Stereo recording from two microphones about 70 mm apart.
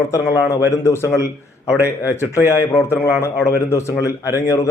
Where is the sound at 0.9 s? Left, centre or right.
Left.